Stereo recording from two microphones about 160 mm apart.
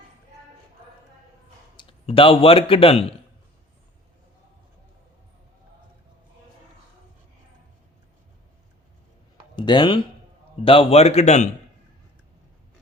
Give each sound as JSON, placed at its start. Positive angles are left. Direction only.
{"t": 1.7, "sound": "speech", "side_deg": 30}
{"t": 9.6, "sound": "speech", "side_deg": 30}